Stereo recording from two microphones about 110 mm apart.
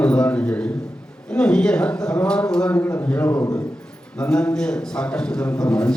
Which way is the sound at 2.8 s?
20° left (ahead or behind).